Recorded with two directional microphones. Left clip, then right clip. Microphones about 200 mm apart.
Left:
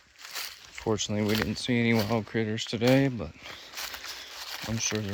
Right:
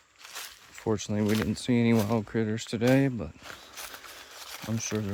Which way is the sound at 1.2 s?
50° left (ahead or behind).